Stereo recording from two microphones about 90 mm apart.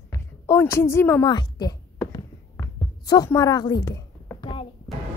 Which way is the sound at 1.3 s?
50° left (ahead or behind).